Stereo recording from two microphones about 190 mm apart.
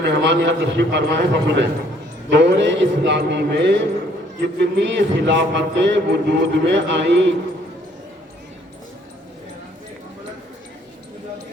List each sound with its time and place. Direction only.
0.0 s a man's voice: 65° right (ahead or behind)